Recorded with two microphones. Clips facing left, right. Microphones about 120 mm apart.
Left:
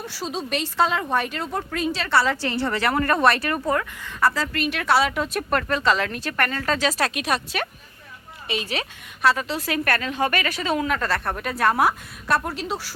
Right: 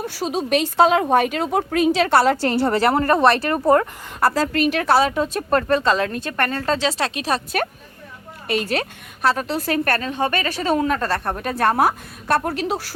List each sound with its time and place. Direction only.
0.0 s a woman's voice: 50° right (ahead or behind); by 7.4 s 35° right (ahead or behind)
8.4 s a woman's voice: 50° right (ahead or behind); by 11.5 s 25° right (ahead or behind)
11.8 s speech: 45° right (ahead or behind)
12.5 s speech: 55° right (ahead or behind)